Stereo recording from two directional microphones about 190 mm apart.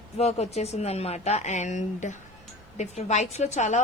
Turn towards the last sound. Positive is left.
turn(degrees=40)  # may be behind; listen again after turning